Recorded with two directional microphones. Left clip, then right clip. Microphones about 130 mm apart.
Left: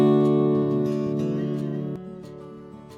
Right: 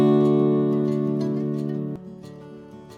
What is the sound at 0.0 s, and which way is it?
Music, centre (ahead or behind).